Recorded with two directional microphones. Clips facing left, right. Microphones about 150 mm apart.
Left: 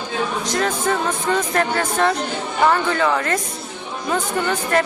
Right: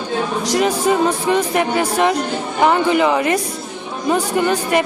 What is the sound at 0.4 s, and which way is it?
Speech, 15° right (ahead or behind).